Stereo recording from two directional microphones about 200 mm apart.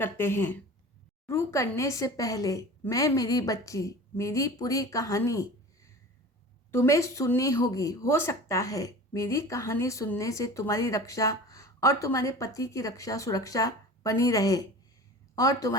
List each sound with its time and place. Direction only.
0.0 s speech: 10° left (ahead or behind)